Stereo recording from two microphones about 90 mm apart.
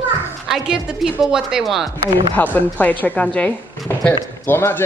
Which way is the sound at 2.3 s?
20° left (ahead or behind).